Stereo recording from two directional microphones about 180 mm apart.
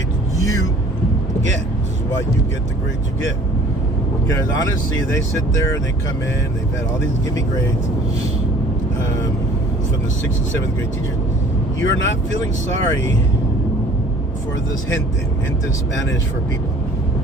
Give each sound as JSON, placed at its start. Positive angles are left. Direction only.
{"t": 4.3, "sound": "speech", "side_deg": 15}
{"t": 11.8, "sound": "speech", "side_deg": 90}